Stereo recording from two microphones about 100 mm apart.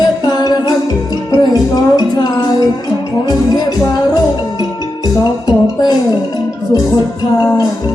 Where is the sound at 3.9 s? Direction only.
45° left (ahead or behind).